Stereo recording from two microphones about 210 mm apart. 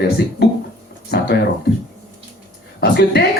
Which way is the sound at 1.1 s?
50° left (ahead or behind).